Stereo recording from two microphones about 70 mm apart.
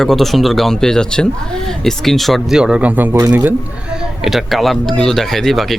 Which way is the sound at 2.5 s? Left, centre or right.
Centre.